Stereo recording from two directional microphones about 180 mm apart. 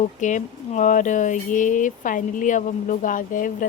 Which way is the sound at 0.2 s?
45° left (ahead or behind).